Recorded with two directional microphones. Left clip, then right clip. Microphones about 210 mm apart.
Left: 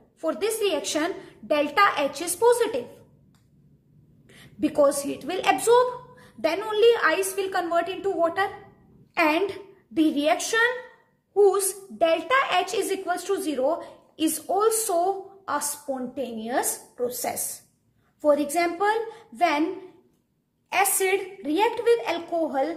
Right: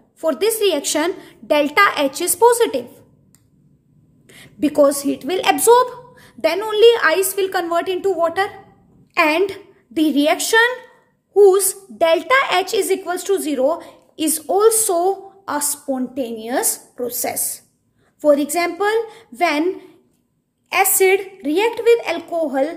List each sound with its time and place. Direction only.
0.2 s a woman's voice: 40° right (ahead or behind)
4.3 s a woman's voice: 40° right (ahead or behind)
20.7 s a woman's voice: 40° right (ahead or behind)